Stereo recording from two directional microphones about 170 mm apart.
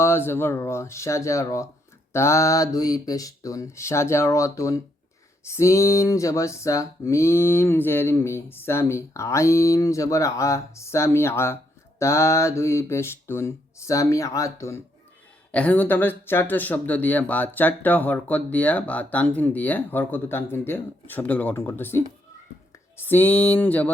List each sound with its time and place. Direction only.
0.0 s speech: 15° left (ahead or behind)